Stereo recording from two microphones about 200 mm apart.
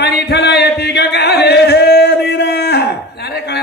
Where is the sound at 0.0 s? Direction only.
55° left (ahead or behind).